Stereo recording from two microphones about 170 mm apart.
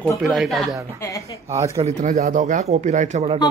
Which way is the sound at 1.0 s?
20° left (ahead or behind).